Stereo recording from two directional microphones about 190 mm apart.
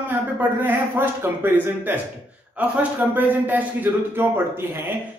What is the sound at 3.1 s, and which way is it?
A man's voice, 10° right (ahead or behind).